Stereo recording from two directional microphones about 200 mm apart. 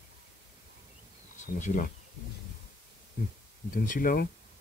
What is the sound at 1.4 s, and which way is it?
Speech, 40° left (ahead or behind).